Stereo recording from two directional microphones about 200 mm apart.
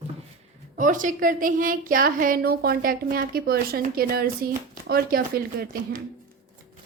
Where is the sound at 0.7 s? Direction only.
40° right (ahead or behind).